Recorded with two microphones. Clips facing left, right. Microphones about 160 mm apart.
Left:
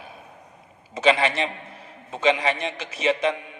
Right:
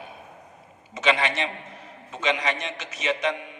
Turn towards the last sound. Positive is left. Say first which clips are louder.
# left 4 dB
turn(degrees=35)  # may be behind; listen again after turning